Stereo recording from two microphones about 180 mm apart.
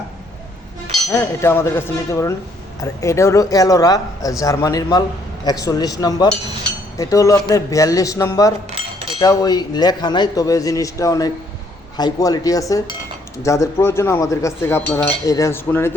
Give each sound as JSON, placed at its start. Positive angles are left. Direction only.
{"t": 1.1, "sound": "speech", "side_deg": 15}